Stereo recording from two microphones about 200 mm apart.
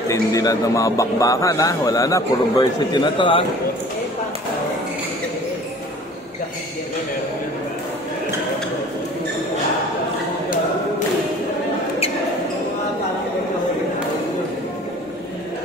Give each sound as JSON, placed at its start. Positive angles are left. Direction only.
{"t": 0.1, "sound": "speech", "side_deg": 15}